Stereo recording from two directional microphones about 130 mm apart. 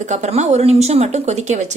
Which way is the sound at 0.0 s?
65° right (ahead or behind).